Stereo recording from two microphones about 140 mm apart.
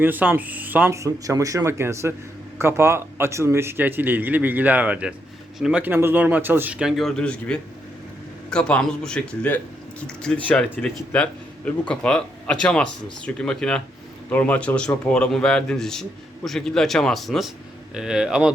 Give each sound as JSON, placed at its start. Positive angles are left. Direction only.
{"t": 0.0, "sound": "a man's voice", "side_deg": -10}
{"t": 5.8, "sound": "a man's voice", "side_deg": -15}